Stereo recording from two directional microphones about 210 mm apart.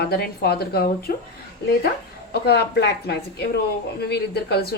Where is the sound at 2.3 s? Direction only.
50° left (ahead or behind).